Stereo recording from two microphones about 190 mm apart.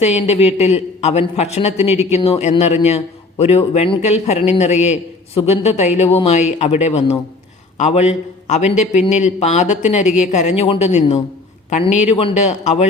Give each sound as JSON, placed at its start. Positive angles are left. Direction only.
{"t": 0.0, "sound": "a man's voice", "side_deg": 35}